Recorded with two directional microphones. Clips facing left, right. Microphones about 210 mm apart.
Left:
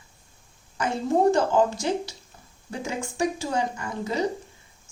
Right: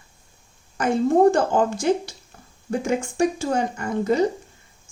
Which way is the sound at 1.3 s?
50° right (ahead or behind).